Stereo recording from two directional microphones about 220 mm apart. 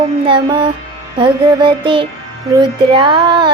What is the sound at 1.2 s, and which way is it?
Child singing, 25° right (ahead or behind).